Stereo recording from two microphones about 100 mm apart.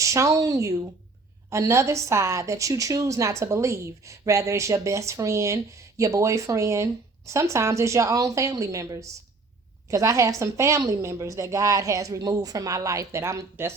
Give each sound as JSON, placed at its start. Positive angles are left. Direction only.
{"t": 0.0, "sound": "a woman's voice", "side_deg": -30}